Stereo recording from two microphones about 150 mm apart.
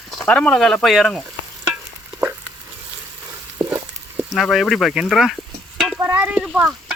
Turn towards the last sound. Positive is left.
turn(degrees=-5)  # may be behind; listen again after turning